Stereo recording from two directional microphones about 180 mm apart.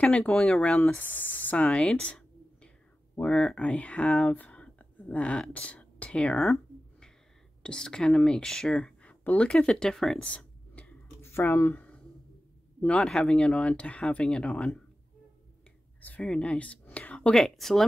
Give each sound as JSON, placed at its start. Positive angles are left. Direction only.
{"t": 0.0, "sound": "speech", "side_deg": 5}
{"t": 16.0, "sound": "speech", "side_deg": 5}